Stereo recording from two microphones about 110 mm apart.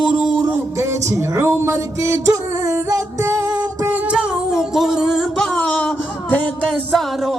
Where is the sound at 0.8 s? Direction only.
25° right (ahead or behind).